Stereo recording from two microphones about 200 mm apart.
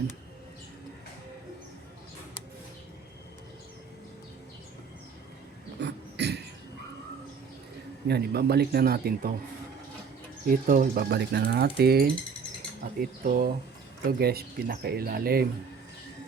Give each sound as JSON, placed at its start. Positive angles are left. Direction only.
{"t": 5.8, "sound": "a sound", "side_deg": -55}
{"t": 8.0, "sound": "speech", "side_deg": -55}
{"t": 10.4, "sound": "speech", "side_deg": -45}